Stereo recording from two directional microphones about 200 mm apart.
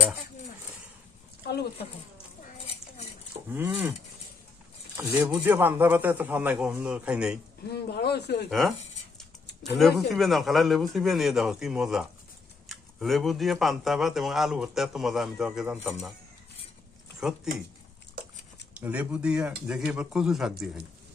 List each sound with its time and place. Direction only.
3.4 s a sound: 10° right (ahead or behind)
4.9 s a man's voice: 10° right (ahead or behind)
7.7 s speech: 55° left (ahead or behind)
8.5 s speech: centre (ahead or behind)
17.2 s speech: 5° right (ahead or behind)
18.7 s speech: 5° right (ahead or behind)